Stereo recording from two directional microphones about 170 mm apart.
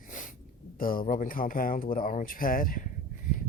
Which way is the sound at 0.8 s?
55° left (ahead or behind).